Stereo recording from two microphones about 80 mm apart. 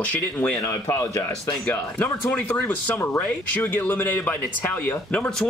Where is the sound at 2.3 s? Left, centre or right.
Centre.